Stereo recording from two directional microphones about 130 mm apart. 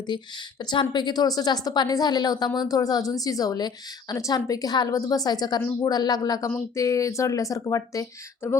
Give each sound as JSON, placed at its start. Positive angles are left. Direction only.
{"t": 0.6, "sound": "a woman's voice", "side_deg": 35}